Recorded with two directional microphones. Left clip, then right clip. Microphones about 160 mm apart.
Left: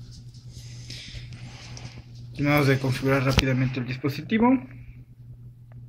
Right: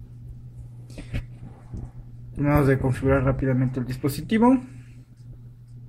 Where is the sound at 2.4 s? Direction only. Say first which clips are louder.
Right 1 dB; 45° right (ahead or behind).